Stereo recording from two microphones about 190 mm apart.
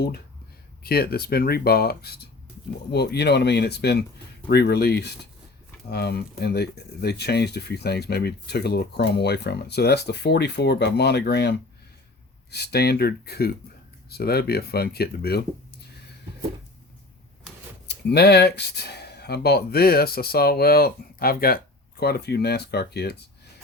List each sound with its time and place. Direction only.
0.8 s speech: 55° left (ahead or behind)
17.8 s speech: 60° left (ahead or behind)